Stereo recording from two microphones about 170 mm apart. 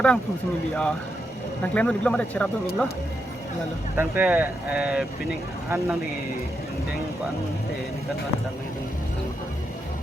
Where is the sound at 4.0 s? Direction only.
10° right (ahead or behind).